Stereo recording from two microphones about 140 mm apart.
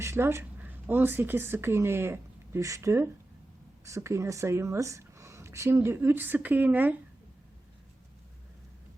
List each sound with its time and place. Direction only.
0.0 s speech: 20° right (ahead or behind)